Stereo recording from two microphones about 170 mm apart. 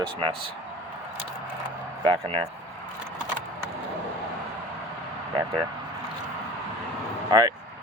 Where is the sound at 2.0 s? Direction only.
35° right (ahead or behind).